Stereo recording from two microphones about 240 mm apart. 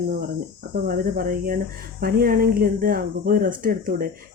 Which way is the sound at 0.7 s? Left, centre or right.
Right.